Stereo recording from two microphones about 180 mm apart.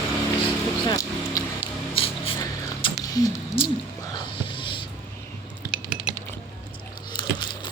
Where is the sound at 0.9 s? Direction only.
20° left (ahead or behind).